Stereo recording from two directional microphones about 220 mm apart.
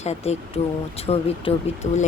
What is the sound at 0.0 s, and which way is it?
Speech, 30° left (ahead or behind).